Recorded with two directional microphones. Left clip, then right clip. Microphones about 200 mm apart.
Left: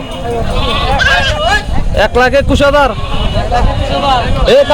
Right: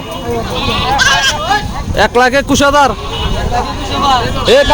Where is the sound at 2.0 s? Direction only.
10° right (ahead or behind).